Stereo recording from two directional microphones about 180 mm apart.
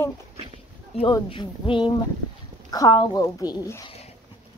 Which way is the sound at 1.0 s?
25° left (ahead or behind).